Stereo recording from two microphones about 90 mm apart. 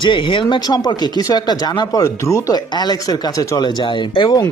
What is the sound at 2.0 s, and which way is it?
Speech, 40° left (ahead or behind).